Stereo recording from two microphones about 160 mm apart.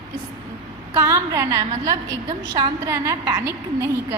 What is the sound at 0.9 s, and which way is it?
Speech, 20° right (ahead or behind).